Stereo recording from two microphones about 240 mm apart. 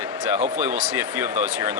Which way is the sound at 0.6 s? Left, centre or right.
Centre.